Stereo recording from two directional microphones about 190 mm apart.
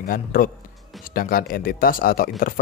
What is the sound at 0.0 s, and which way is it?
Speech, 50° left (ahead or behind).